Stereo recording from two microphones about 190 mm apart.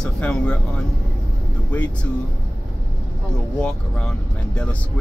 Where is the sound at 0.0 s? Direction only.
5° left (ahead or behind).